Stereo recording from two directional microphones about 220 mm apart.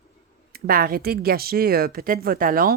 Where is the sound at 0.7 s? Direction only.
40° right (ahead or behind).